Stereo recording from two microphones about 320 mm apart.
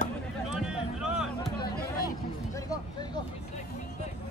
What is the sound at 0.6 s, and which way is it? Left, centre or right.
Music, centre.